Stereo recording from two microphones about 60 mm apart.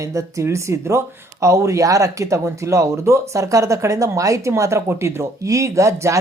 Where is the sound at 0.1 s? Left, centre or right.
Right.